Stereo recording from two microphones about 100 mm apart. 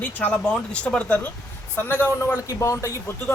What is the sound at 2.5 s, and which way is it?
Speech, 35° left (ahead or behind).